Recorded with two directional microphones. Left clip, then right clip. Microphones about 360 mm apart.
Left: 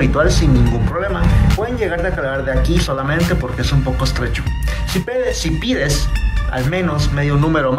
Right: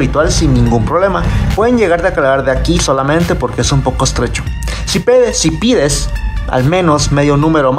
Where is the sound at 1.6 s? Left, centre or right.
Centre.